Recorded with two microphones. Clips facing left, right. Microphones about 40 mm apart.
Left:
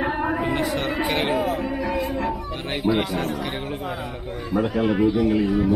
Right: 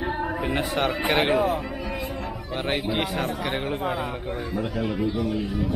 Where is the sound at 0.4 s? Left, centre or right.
Centre.